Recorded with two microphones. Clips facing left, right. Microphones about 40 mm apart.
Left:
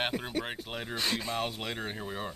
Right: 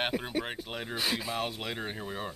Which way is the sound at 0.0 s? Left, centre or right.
Centre.